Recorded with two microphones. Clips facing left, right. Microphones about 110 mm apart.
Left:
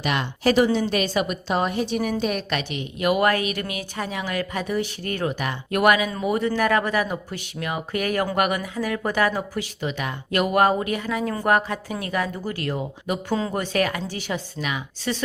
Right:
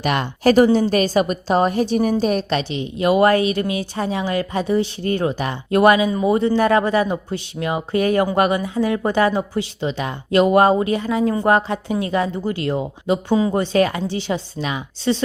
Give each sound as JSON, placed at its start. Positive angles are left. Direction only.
{"t": 0.0, "sound": "a woman's voice", "side_deg": -45}